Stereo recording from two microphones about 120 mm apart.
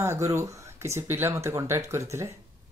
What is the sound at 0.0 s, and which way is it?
Speech, 25° right (ahead or behind).